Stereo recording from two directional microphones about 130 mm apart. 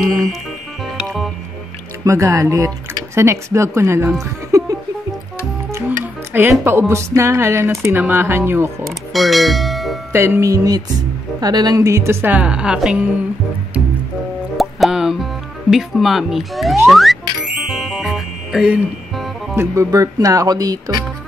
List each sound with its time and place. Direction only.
2.0 s speech: 25° right (ahead or behind)
4.2 s music: 25° right (ahead or behind)
6.6 s speech: 15° right (ahead or behind)
8.8 s music: centre (ahead or behind)
10.1 s a woman's voice: 20° right (ahead or behind)
14.6 s music: centre (ahead or behind)
15.7 s speech: centre (ahead or behind)
16.9 s music: centre (ahead or behind)
19.5 s speech: 20° right (ahead or behind)